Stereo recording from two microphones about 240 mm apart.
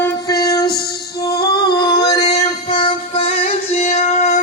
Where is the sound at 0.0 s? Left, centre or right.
Centre.